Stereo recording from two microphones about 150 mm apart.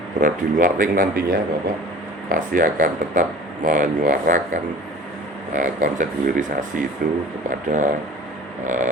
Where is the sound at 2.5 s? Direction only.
60° right (ahead or behind).